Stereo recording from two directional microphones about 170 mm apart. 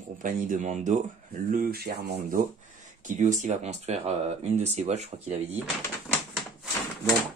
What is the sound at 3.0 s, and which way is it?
Speech, 45° right (ahead or behind).